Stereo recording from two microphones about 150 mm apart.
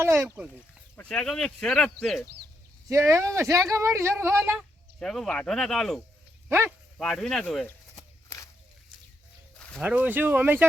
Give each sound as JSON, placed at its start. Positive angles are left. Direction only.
{"t": 0.0, "sound": "speech", "side_deg": -15}
{"t": 0.9, "sound": "speech", "side_deg": 5}
{"t": 2.9, "sound": "speech", "side_deg": -20}
{"t": 4.5, "sound": "speech", "side_deg": 5}
{"t": 6.5, "sound": "speech", "side_deg": -15}
{"t": 7.0, "sound": "speech", "side_deg": 5}
{"t": 9.8, "sound": "speech", "side_deg": -10}